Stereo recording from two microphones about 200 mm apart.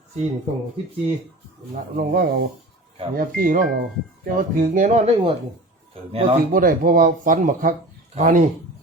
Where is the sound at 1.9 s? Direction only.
50° right (ahead or behind).